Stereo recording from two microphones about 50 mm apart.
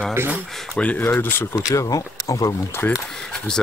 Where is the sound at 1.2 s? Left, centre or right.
Left.